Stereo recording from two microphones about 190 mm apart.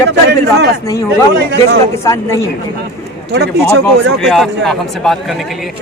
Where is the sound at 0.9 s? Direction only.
15° left (ahead or behind).